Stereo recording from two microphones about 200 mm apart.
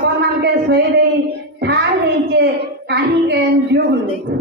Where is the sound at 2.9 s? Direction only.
55° right (ahead or behind).